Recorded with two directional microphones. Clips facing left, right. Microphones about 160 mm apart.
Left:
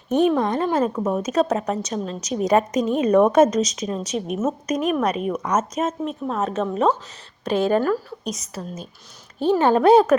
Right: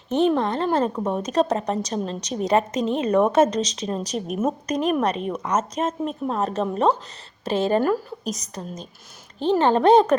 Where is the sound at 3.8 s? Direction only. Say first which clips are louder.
Left 1 dB; 35° right (ahead or behind).